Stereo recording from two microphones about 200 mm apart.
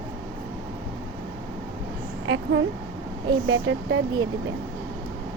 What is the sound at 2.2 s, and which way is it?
Speech, 70° right (ahead or behind).